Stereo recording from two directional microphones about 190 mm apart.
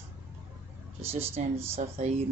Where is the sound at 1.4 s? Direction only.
40° right (ahead or behind).